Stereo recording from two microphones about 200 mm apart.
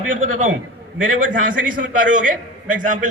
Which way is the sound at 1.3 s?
40° right (ahead or behind).